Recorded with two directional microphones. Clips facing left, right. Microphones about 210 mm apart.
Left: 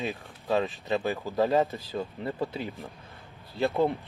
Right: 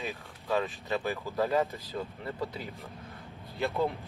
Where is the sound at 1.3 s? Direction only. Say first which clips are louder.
Left 4 dB; 30° left (ahead or behind).